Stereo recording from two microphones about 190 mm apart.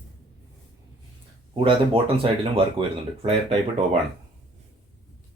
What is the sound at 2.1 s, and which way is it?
Speech, 30° right (ahead or behind).